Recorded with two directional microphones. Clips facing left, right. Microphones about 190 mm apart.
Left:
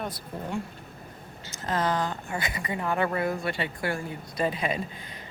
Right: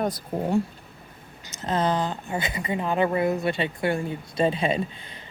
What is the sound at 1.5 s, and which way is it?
Speech, 20° right (ahead or behind).